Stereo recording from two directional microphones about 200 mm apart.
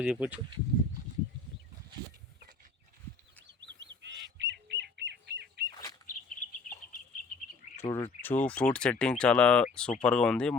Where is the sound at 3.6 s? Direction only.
65° right (ahead or behind).